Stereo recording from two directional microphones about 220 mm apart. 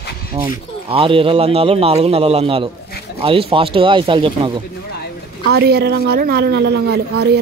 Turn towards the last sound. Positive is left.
turn(degrees=-50)  # may be behind; listen again after turning